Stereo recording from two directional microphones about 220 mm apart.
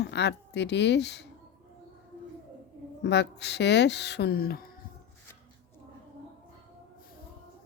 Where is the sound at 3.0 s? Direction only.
50° left (ahead or behind).